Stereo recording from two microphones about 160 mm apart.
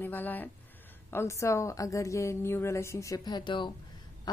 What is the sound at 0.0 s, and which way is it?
A woman's voice, 10° left (ahead or behind).